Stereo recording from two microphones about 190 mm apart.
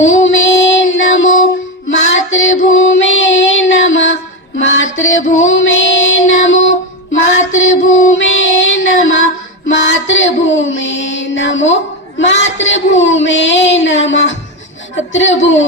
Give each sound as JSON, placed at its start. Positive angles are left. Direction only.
{"t": 0.0, "sound": "child singing", "side_deg": 85}
{"t": 9.6, "sound": "music", "side_deg": 70}
{"t": 12.2, "sound": "speech", "side_deg": 75}